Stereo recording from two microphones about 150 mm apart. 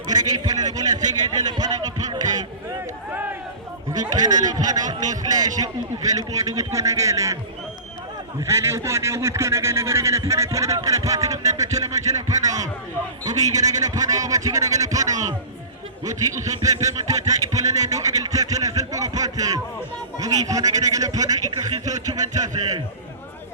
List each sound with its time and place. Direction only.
0.1 s a sound: 25° right (ahead or behind)
4.0 s speech: 25° right (ahead or behind)
8.4 s speech: 20° right (ahead or behind)